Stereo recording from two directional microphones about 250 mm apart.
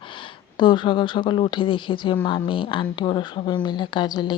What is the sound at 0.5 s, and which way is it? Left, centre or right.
Speech, centre.